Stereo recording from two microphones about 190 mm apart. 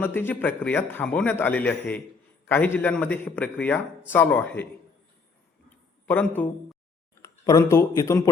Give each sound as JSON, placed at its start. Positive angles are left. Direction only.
{"t": 0.0, "sound": "a man's voice", "side_deg": 10}
{"t": 6.1, "sound": "a man's voice", "side_deg": 10}